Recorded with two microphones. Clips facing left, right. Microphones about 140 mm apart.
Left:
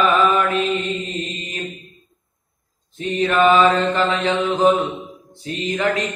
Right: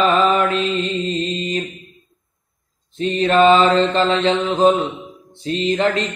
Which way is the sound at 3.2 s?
30° right (ahead or behind).